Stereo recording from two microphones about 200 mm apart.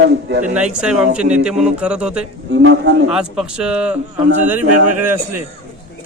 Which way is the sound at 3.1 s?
5° right (ahead or behind).